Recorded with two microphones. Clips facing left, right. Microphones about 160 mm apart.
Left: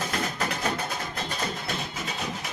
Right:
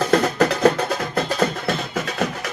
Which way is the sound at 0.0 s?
65° right (ahead or behind).